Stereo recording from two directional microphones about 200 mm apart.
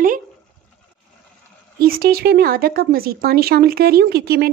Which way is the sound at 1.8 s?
45° right (ahead or behind).